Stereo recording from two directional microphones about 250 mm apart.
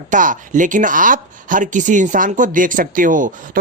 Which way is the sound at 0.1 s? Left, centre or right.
Right.